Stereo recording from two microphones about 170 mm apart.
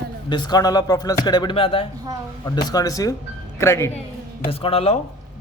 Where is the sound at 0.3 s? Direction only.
25° left (ahead or behind).